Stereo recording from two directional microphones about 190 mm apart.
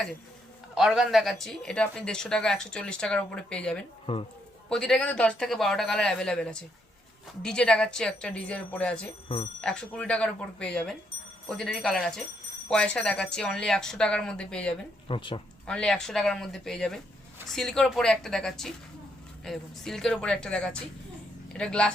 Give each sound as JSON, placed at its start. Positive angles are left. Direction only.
{"t": 0.8, "sound": "speech", "side_deg": 0}
{"t": 4.0, "sound": "speech", "side_deg": 30}
{"t": 4.7, "sound": "speech", "side_deg": 5}
{"t": 15.0, "sound": "speech", "side_deg": 25}
{"t": 15.6, "sound": "speech", "side_deg": 5}